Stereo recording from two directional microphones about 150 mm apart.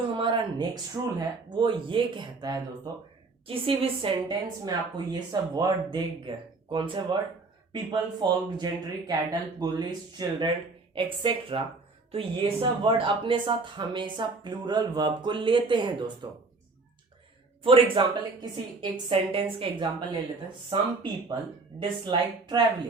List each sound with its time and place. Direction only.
0.2 s speech: 35° right (ahead or behind)
3.4 s speech: 40° right (ahead or behind)
17.9 s speech: 30° right (ahead or behind)